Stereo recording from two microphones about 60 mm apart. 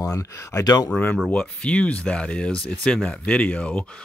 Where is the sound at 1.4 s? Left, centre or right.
Centre.